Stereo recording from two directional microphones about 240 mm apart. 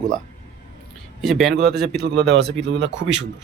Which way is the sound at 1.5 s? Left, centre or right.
Right.